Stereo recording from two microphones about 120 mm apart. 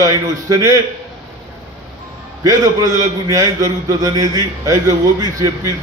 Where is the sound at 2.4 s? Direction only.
30° right (ahead or behind).